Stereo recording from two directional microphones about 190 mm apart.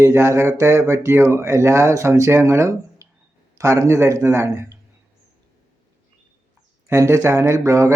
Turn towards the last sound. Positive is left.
turn(degrees=-15)  # may be behind; listen again after turning